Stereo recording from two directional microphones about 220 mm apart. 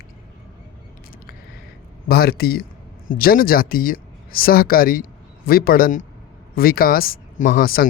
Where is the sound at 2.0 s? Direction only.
45° left (ahead or behind).